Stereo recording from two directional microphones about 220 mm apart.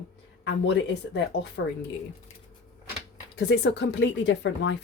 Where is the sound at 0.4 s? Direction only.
55° left (ahead or behind).